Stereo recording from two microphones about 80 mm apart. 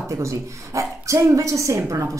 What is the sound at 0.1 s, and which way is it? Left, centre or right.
Speech, right.